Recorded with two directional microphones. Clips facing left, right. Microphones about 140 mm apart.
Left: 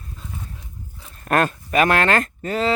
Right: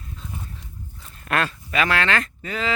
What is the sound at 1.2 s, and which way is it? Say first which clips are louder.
Speech: left 5 dB; 45° left (ahead or behind).